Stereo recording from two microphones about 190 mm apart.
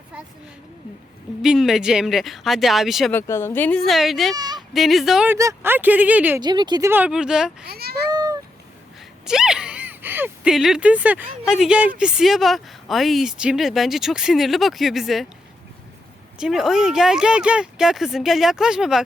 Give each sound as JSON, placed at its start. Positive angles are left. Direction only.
{"t": 1.4, "sound": "speech", "side_deg": 0}
{"t": 3.1, "sound": "speech", "side_deg": 10}
{"t": 4.4, "sound": "speech", "side_deg": -20}
{"t": 4.7, "sound": "speech", "side_deg": 0}
{"t": 6.4, "sound": "speech", "side_deg": -20}
{"t": 6.9, "sound": "speech", "side_deg": -5}
{"t": 7.6, "sound": "a child's voice", "side_deg": -55}
{"t": 8.1, "sound": "a sound", "side_deg": -20}
{"t": 9.2, "sound": "speech", "side_deg": -5}
{"t": 16.4, "sound": "speech", "side_deg": 0}